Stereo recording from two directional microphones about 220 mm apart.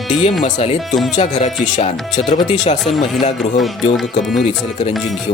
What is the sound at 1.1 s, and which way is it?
Speech, 30° left (ahead or behind).